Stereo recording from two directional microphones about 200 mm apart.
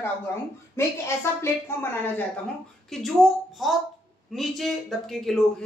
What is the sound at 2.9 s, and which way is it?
A man's voice, centre (ahead or behind).